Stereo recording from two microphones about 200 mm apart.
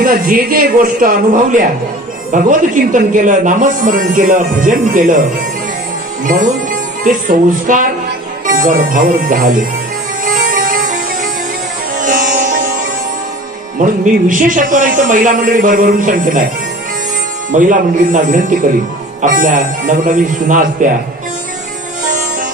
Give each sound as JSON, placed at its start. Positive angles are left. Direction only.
{"t": 0.0, "sound": "a man's voice", "side_deg": -45}
{"t": 6.2, "sound": "speech", "side_deg": -40}
{"t": 10.2, "sound": "music", "side_deg": -45}
{"t": 12.0, "sound": "music", "side_deg": -40}
{"t": 13.7, "sound": "speech", "side_deg": -40}
{"t": 17.5, "sound": "speech", "side_deg": -40}